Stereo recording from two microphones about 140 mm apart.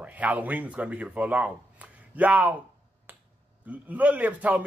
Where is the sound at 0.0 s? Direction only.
10° right (ahead or behind).